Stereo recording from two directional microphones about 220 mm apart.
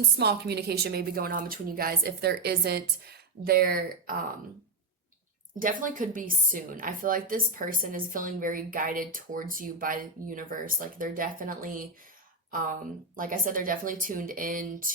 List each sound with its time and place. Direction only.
0.2 s a woman's voice: 45° right (ahead or behind)
5.5 s a woman's voice: 40° right (ahead or behind)